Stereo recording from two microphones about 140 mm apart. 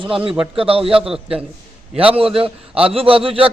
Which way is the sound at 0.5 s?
40° right (ahead or behind).